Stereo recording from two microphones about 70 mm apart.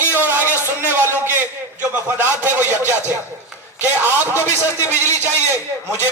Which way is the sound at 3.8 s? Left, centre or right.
Right.